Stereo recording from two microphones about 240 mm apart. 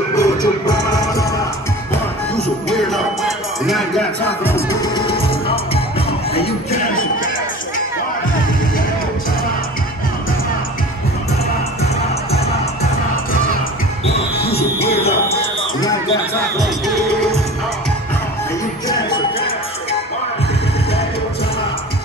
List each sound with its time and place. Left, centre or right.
0.1 s music: centre
2.7 s music: centre
4.8 s music: centre
14.4 s music: left
15.8 s a sound: centre
18.9 s music: centre